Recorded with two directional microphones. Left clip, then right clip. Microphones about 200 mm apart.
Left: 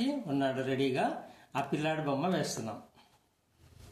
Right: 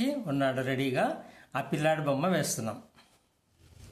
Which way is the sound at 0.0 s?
50° right (ahead or behind).